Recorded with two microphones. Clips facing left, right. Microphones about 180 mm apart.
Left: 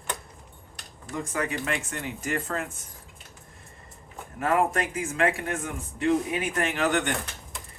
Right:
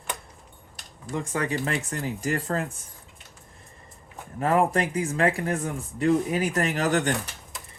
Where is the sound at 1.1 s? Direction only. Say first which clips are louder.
Right 2 dB; 30° right (ahead or behind).